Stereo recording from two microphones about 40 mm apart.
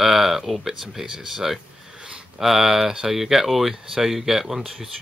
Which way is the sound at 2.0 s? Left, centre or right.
Right.